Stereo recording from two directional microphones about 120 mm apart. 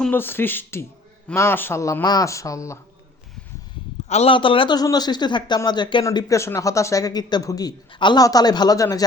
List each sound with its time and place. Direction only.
0.0 s a man's voice: 15° left (ahead or behind)
4.1 s a man's voice: 60° left (ahead or behind)
4.4 s a man's voice: 45° left (ahead or behind)
4.8 s speech: 35° left (ahead or behind)
6.1 s speech: 25° left (ahead or behind)